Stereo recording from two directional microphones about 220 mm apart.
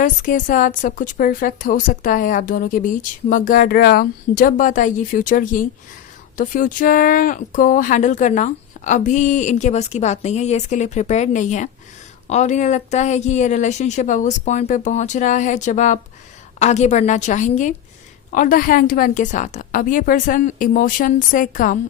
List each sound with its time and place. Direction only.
0.0 s a woman's voice: 35° left (ahead or behind)